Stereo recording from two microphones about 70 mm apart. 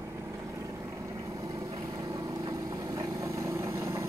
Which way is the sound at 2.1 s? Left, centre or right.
Right.